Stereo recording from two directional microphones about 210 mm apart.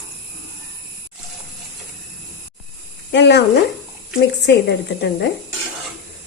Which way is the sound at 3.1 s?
55° left (ahead or behind).